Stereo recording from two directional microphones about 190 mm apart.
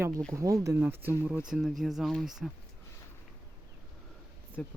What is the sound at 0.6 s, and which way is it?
Speech, 15° right (ahead or behind).